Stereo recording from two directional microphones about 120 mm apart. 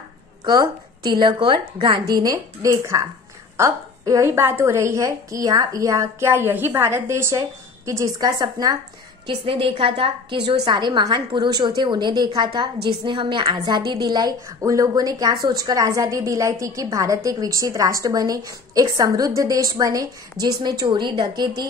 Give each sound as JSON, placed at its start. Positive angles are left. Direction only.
{"t": 0.5, "sound": "a woman's voice", "side_deg": -35}
{"t": 9.2, "sound": "a woman's voice", "side_deg": -45}
{"t": 10.6, "sound": "a woman's voice", "side_deg": -40}